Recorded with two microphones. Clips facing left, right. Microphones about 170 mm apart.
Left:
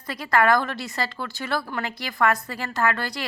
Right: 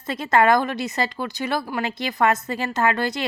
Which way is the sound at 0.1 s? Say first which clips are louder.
Right 3 dB; 25° right (ahead or behind).